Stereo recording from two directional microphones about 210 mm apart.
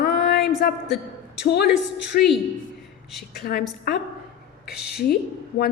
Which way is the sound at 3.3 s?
50° left (ahead or behind).